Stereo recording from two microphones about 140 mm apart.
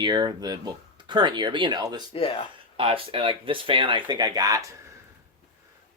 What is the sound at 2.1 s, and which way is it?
Speech, 40° left (ahead or behind).